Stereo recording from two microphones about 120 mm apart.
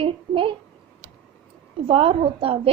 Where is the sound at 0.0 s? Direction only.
45° right (ahead or behind).